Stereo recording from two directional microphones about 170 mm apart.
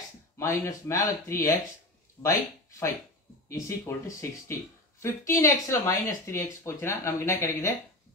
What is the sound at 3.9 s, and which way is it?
Speech, 15° left (ahead or behind).